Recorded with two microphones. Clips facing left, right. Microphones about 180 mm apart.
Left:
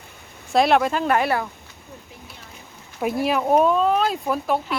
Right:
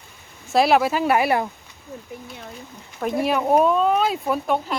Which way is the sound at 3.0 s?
5° left (ahead or behind).